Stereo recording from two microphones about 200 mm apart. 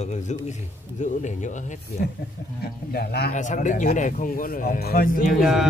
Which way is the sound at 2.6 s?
50° left (ahead or behind).